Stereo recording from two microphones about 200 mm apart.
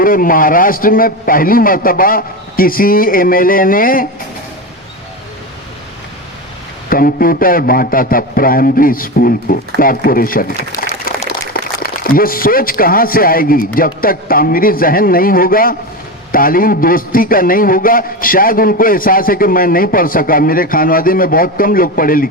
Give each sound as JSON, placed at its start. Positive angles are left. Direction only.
{"t": 0.0, "sound": "a man's voice", "side_deg": 45}
{"t": 6.9, "sound": "a man's voice", "side_deg": 45}